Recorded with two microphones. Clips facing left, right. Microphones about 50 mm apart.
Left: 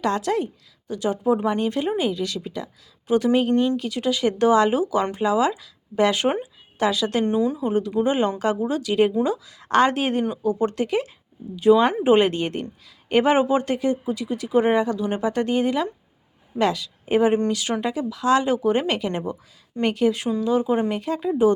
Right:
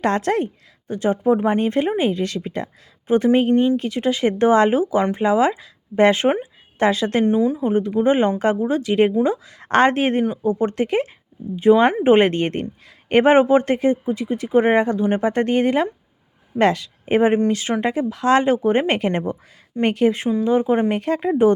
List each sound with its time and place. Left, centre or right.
0.0 s speech: right
3.5 s speech: centre
3.8 s speech: right
7.3 s speech: centre; by 20.9 s right
20.9 s speech: right